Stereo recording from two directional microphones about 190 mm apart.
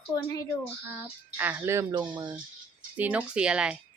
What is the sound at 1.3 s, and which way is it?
Speech, 10° right (ahead or behind).